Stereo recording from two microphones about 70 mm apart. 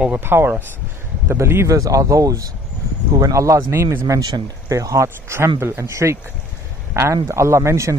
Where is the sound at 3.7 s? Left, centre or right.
Right.